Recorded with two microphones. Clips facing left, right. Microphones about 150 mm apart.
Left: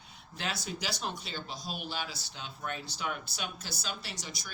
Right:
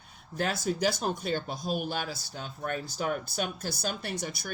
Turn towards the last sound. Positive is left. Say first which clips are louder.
# right 9 dB
turn(degrees=-55)  # may be behind; listen again after turning